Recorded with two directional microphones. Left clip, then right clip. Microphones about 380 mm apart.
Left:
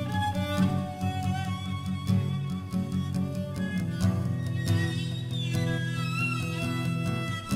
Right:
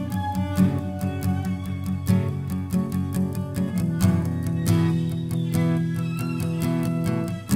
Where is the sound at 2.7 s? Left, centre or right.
Left.